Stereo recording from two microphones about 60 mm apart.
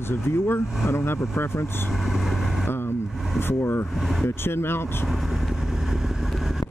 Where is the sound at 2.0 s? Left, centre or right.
Centre.